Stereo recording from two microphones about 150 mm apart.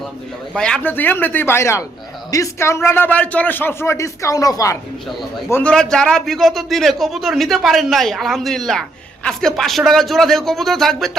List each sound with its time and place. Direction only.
0.5 s a man's voice: 5° left (ahead or behind)